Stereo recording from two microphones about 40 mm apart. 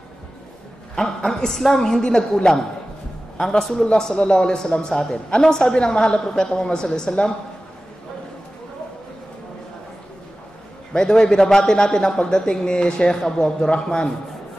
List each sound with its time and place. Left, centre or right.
1.0 s a man's voice: centre
10.9 s a man's voice: centre